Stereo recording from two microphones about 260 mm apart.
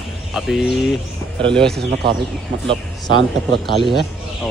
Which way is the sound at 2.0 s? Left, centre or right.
Right.